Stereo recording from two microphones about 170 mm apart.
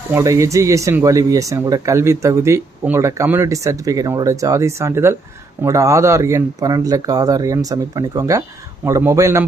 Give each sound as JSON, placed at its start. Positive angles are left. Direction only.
{"t": 0.1, "sound": "speech", "side_deg": -20}